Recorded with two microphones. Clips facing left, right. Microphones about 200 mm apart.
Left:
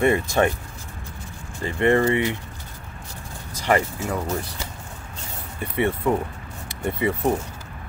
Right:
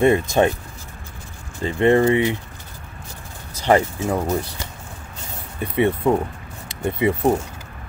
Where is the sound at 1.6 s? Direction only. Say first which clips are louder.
Right 3 dB; 20° right (ahead or behind).